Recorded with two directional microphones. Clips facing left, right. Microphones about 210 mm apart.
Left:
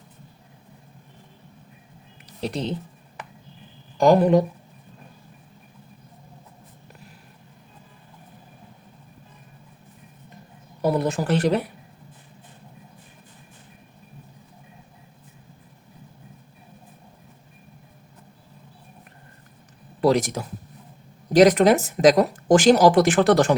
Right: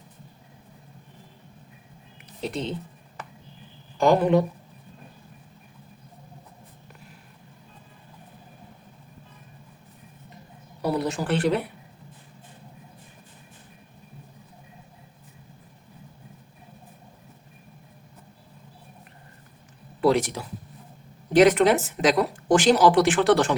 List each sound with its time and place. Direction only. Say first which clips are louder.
2.4 s speech: left 2 dB; 40° left (ahead or behind)
3.9 s speech: left 3 dB; 40° left (ahead or behind)
10.9 s speech: left 1 dB; 50° left (ahead or behind)
20.0 s speech: left 2 dB; 40° left (ahead or behind)